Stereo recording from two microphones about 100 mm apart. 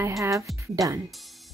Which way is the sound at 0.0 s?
35° right (ahead or behind).